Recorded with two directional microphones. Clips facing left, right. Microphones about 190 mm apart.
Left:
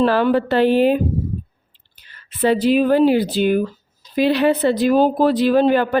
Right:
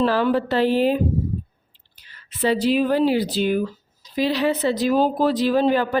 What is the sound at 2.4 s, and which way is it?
Speech, 55° left (ahead or behind).